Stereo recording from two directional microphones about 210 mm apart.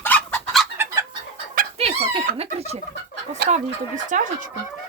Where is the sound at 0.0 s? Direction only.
5° left (ahead or behind).